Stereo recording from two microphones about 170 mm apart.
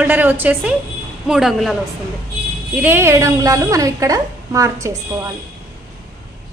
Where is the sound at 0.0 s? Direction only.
10° right (ahead or behind).